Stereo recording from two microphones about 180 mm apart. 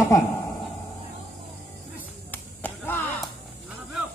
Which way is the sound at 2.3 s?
10° left (ahead or behind).